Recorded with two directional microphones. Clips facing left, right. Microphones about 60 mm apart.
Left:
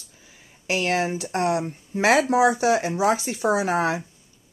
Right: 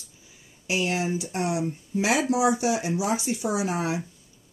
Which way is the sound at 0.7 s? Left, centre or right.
Left.